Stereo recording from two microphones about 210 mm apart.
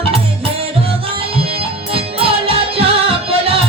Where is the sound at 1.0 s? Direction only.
25° right (ahead or behind).